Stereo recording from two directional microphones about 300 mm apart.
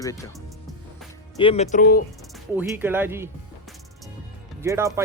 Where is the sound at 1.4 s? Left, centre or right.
Centre.